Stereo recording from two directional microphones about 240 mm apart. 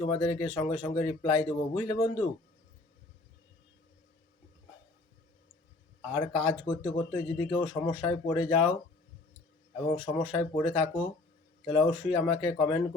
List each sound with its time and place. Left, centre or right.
0.1 s speech: centre
6.1 s speech: centre
10.0 s speech: centre